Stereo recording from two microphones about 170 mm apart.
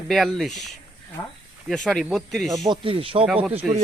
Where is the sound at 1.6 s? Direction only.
Centre (ahead or behind).